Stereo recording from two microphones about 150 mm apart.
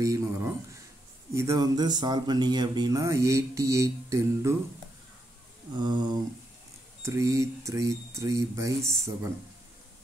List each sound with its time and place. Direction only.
0.0 s a sound: 20° right (ahead or behind)
1.3 s speech: 20° right (ahead or behind)
5.8 s speech: 30° right (ahead or behind)